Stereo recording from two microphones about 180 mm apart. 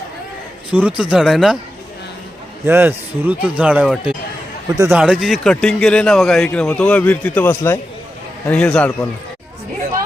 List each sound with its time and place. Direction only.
0.7 s speech: 5° right (ahead or behind)
2.6 s a man's voice: 10° right (ahead or behind)
4.7 s a man's voice: 20° right (ahead or behind)
4.9 s a man's voice: 5° right (ahead or behind)